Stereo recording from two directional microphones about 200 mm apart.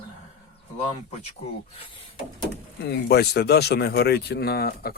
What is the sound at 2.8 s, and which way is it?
Speech, 55° left (ahead or behind).